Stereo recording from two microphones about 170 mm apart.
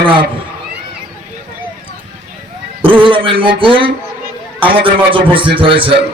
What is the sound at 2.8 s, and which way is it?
A man's voice, 30° right (ahead or behind).